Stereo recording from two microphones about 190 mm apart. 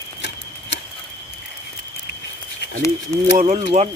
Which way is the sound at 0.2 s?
65° left (ahead or behind).